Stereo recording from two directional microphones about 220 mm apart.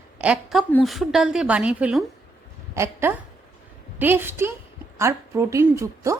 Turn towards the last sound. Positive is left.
turn(degrees=-15)  # may be behind; listen again after turning